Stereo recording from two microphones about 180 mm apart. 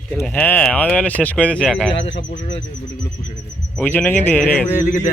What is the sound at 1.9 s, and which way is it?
Speech, 80° left.